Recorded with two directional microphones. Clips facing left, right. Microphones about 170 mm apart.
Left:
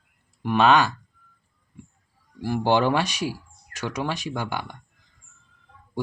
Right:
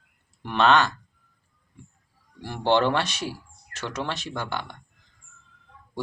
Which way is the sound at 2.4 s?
10° left (ahead or behind).